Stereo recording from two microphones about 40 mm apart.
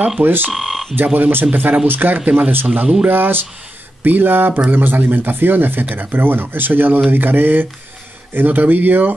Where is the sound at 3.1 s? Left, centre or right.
Right.